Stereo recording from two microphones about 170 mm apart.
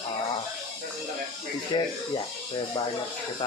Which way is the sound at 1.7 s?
30° left (ahead or behind).